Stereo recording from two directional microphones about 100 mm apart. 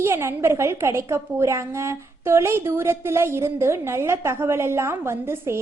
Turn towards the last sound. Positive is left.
turn(degrees=-25)  # may be behind; listen again after turning